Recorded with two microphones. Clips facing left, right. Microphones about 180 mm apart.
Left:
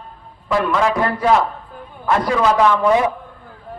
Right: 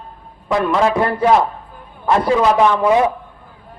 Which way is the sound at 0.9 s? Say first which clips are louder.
Right 2 dB; 25° right (ahead or behind).